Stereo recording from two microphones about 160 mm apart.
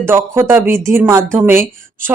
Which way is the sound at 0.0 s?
15° right (ahead or behind).